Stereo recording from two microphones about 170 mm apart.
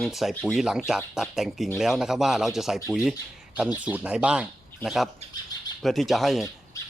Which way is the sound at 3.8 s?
5° right (ahead or behind).